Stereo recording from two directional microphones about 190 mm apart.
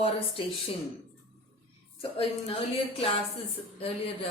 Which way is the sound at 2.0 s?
30° left (ahead or behind).